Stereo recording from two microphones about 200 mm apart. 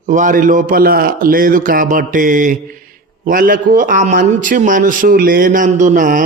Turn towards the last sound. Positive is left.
turn(degrees=-40)  # may be behind; listen again after turning